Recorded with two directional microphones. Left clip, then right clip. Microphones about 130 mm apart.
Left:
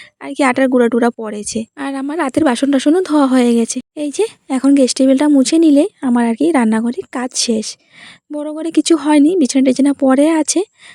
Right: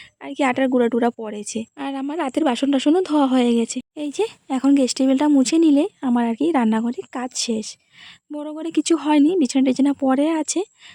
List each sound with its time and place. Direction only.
0.2 s a woman's voice: 40° left (ahead or behind)